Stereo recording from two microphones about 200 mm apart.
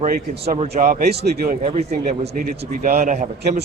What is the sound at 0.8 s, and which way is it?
Speech, 50° right (ahead or behind).